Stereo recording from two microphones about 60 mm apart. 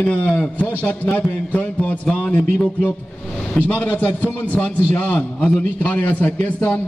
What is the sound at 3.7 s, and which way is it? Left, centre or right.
A man's voice, left.